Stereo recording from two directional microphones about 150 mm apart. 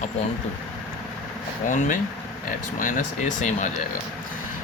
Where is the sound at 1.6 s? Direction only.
60° left (ahead or behind).